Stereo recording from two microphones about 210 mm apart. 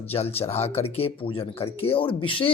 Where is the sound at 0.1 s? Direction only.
30° left (ahead or behind).